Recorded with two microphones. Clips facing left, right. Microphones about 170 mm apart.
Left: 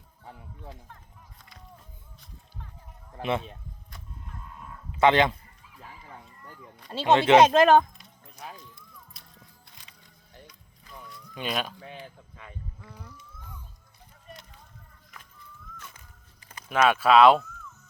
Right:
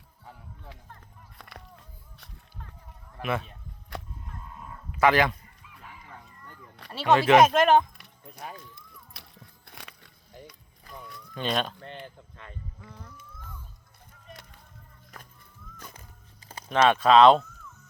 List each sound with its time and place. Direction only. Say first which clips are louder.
1.4 s speech: right 9 dB; 65° right (ahead or behind)
3.2 s speech: left 2 dB; 25° left (ahead or behind)
3.9 s music: right 16 dB; 70° right (ahead or behind)
4.3 s livestock: right 1 dB; 5° right (ahead or behind)
4.9 s speech: left 1 dB; 25° left (ahead or behind)
6.4 s a sound: left 2 dB; 10° left (ahead or behind)
6.9 s speech: left 1 dB; 25° left (ahead or behind)
7.9 s keys jangling: right 3 dB; 65° right (ahead or behind)
8.7 s music: right 1 dB; 65° right (ahead or behind)
11.3 s a sound: right 3 dB; 5° left (ahead or behind)
16.6 s speech: right 1 dB; 5° left (ahead or behind)